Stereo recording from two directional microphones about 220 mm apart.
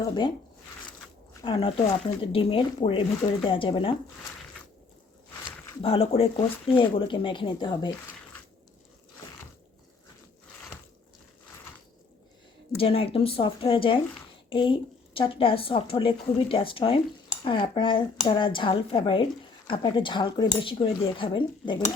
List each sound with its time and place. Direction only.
1.5 s speech: 25° left (ahead or behind)
5.8 s speech: 25° left (ahead or behind)
12.7 s speech: 25° left (ahead or behind)